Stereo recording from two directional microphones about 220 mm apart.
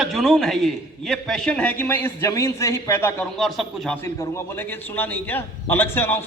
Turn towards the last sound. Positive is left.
turn(degrees=10)  # may be behind; listen again after turning